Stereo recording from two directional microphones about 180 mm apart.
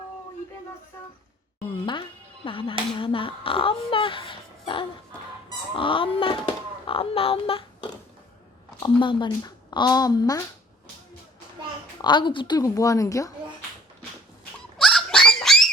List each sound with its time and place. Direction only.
1.8 s speech: 30° left (ahead or behind)
12.0 s speech: 25° left (ahead or behind)
14.8 s pig: centre (ahead or behind)